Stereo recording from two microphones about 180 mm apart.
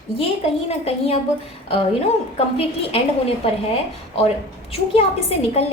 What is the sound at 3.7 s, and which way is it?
A woman's voice, 35° left (ahead or behind).